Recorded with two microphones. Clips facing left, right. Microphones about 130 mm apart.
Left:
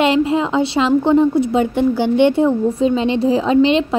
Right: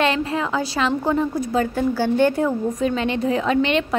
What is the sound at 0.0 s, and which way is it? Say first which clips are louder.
A woman's voice: left 6 dB; 25° left (ahead or behind).